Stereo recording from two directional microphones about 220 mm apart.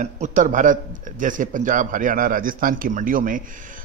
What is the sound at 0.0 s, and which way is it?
Speech, 35° right (ahead or behind).